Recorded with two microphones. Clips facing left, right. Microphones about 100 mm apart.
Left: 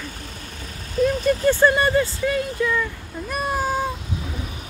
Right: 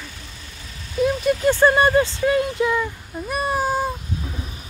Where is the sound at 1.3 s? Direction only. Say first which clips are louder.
Right 1 dB; 15° right (ahead or behind).